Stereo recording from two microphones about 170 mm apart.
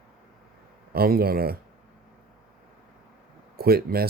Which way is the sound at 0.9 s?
65° right (ahead or behind).